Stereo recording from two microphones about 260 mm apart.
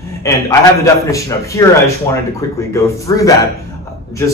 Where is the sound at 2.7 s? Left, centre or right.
Centre.